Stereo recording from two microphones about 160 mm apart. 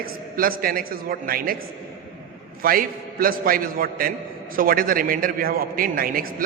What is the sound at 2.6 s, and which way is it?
A man's voice, 65° right (ahead or behind).